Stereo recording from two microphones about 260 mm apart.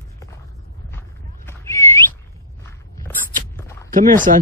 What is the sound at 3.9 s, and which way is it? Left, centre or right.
Speech, right.